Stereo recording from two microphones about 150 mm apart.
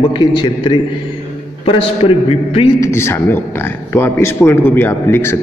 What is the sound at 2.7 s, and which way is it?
A man's voice, 20° left (ahead or behind).